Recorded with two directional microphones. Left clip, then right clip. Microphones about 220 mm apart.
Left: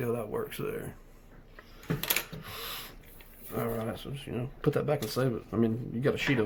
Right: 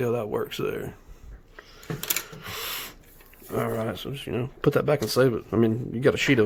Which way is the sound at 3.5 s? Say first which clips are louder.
Right 6 dB; 55° right (ahead or behind).